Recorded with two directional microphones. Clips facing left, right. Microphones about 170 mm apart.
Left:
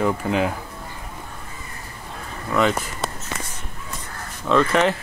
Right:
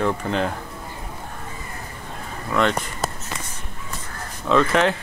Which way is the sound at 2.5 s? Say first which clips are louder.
Left 1 dB; 5° left (ahead or behind).